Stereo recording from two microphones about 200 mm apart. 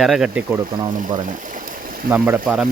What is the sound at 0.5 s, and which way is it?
Speech, 20° right (ahead or behind).